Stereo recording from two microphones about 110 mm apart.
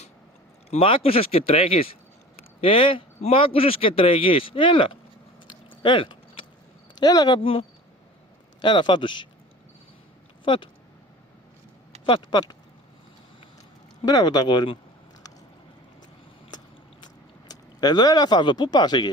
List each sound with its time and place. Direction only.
0.7 s speech: 55° left (ahead or behind)
5.5 s a sound: 50° left (ahead or behind)
7.0 s speech: 35° left (ahead or behind)
7.3 s speech: 60° left (ahead or behind)
8.6 s speech: 45° left (ahead or behind)
10.4 s speech: 45° left (ahead or behind)
12.0 s speech: 45° left (ahead or behind)
14.0 s speech: 35° left (ahead or behind)
17.5 s speech: 40° left (ahead or behind)